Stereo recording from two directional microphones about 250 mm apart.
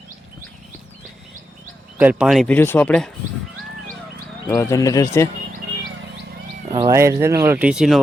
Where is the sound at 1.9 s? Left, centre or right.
Centre.